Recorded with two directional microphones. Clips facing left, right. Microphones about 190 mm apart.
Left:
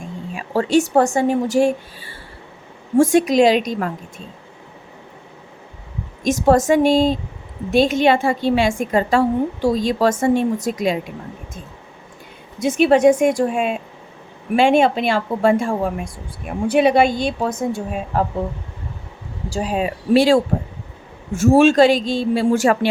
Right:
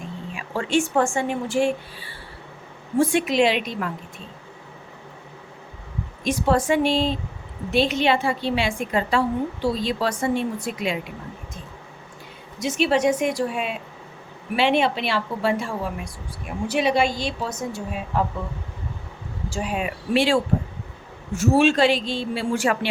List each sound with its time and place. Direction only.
0.3 s a woman's voice: 40° left (ahead or behind)
6.2 s a woman's voice: 45° left (ahead or behind)
12.5 s a woman's voice: 55° left (ahead or behind)
19.5 s a woman's voice: 35° left (ahead or behind)